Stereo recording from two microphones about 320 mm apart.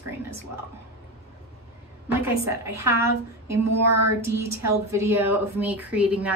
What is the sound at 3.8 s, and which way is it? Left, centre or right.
Child singing, right.